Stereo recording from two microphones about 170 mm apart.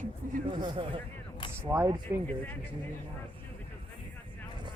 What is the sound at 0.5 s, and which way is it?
Speech, 30° right (ahead or behind).